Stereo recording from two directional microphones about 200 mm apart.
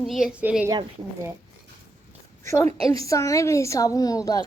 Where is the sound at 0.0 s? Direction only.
Centre (ahead or behind).